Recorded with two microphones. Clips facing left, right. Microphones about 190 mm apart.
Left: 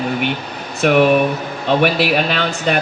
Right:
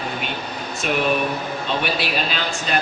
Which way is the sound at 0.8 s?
65° left (ahead or behind).